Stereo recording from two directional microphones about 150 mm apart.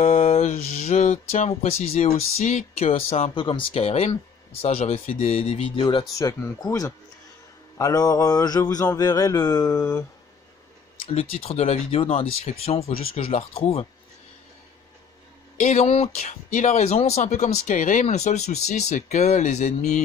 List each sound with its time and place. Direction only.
0.0 s a man's voice: 45° left (ahead or behind); by 10.0 s 20° left (ahead or behind)
11.1 s speech: 40° left (ahead or behind)
15.6 s speech: 45° left (ahead or behind)